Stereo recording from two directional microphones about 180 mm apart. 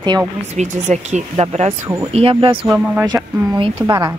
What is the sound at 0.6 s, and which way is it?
Speech, 40° right (ahead or behind).